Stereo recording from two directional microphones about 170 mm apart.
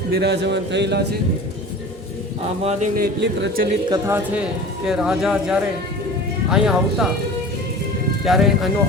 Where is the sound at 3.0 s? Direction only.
75° right (ahead or behind).